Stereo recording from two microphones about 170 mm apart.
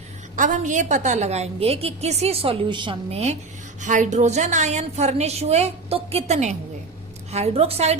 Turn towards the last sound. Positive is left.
turn(degrees=-35)  # may be behind; listen again after turning